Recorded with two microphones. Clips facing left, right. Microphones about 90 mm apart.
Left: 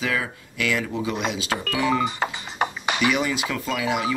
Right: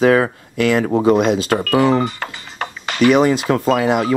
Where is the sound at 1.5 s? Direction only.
70° right (ahead or behind).